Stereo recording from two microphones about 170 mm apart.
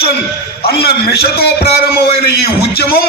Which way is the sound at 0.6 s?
70° left (ahead or behind).